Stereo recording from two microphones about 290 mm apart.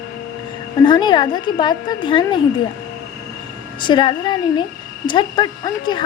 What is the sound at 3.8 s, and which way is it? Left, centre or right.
A child's voice, centre.